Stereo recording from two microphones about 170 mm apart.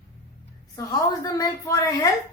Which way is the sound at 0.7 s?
20° left (ahead or behind).